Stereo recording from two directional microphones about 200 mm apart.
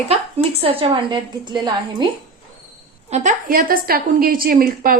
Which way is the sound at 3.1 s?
40° right (ahead or behind).